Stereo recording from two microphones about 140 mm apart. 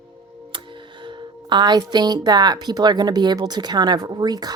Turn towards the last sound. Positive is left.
turn(degrees=-30)  # may be behind; listen again after turning